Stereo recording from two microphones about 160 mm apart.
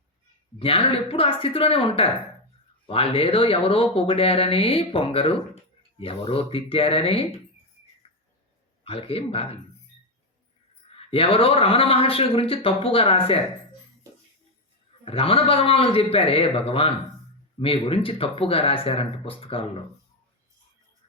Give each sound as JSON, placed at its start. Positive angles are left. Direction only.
{"t": 0.6, "sound": "speech", "side_deg": 35}
{"t": 8.0, "sound": "bird", "side_deg": 40}
{"t": 8.8, "sound": "speech", "side_deg": 35}
{"t": 10.9, "sound": "speech", "side_deg": 35}
{"t": 15.0, "sound": "speech", "side_deg": 35}